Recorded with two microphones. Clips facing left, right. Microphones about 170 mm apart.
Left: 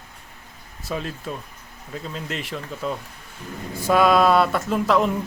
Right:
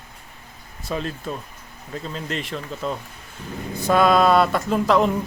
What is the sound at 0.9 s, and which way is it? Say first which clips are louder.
Speech: right 2 dB; 5° left (ahead or behind).